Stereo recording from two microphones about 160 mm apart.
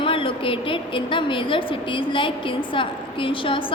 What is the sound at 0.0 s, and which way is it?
A woman's voice, 35° left (ahead or behind).